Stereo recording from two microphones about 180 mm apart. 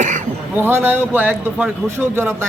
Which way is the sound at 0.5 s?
10° right (ahead or behind).